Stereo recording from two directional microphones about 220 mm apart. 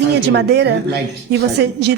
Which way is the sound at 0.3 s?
50° right (ahead or behind).